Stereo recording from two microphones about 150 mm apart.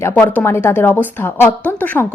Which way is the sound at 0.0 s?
10° left (ahead or behind).